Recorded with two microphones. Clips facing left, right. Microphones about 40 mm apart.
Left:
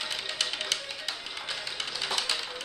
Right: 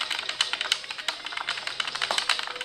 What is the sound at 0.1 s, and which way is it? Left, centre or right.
Music, right.